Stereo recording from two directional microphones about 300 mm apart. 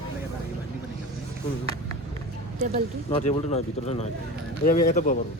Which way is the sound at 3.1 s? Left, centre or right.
Left.